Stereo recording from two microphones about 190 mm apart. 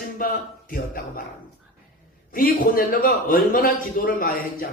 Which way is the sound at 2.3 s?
50° left (ahead or behind).